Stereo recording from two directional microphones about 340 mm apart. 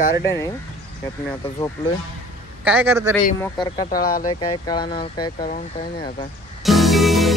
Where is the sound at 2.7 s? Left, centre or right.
Centre.